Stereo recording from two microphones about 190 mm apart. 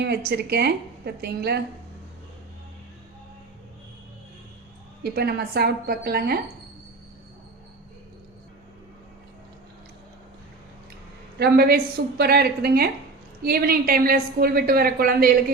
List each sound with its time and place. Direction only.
0.0 s a woman's voice: 60° right (ahead or behind)
5.0 s a woman's voice: 55° right (ahead or behind)
11.3 s a woman's voice: 55° right (ahead or behind)